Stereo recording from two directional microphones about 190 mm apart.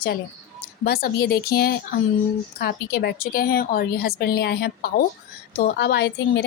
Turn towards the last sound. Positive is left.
turn(degrees=60)  # may be behind; listen again after turning